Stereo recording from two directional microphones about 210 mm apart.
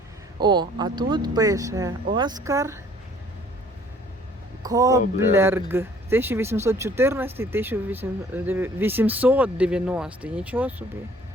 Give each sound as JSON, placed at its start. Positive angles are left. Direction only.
{"t": 0.3, "sound": "speech", "side_deg": -20}
{"t": 4.6, "sound": "speech", "side_deg": -15}